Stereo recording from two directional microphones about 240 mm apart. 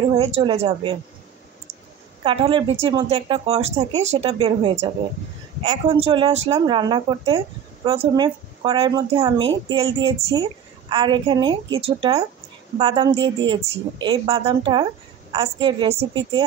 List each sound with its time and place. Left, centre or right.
0.1 s a woman's voice: right
2.2 s a woman's voice: right